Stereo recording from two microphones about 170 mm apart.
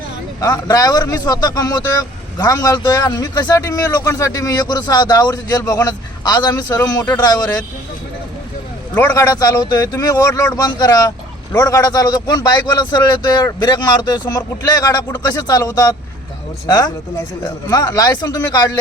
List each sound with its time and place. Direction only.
0.7 s a man's voice: 20° left (ahead or behind)
9.0 s a man's voice: 20° left (ahead or behind)